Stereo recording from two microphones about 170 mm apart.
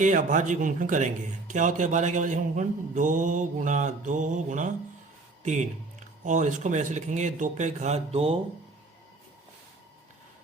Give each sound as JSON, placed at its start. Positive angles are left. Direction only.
{"t": 0.0, "sound": "a man's voice", "side_deg": -50}